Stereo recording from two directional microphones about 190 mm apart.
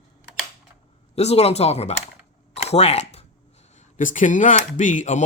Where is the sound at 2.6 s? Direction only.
35° left (ahead or behind).